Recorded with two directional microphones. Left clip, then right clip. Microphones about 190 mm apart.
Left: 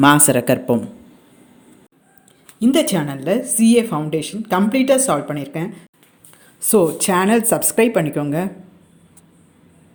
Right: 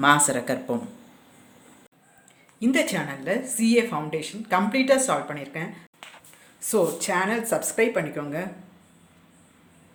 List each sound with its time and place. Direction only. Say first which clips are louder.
0.0 s speech: left 6 dB; 40° left (ahead or behind)
2.6 s speech: left 7 dB; 30° left (ahead or behind)